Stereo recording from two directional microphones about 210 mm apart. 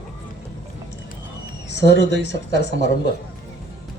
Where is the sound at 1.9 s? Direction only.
55° left (ahead or behind).